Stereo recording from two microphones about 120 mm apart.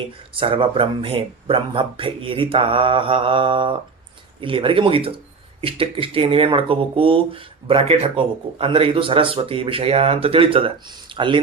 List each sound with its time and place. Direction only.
0.3 s speech: 45° right (ahead or behind)